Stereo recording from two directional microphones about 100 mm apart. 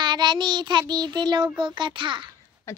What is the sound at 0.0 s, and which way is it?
Child singing, 45° right (ahead or behind).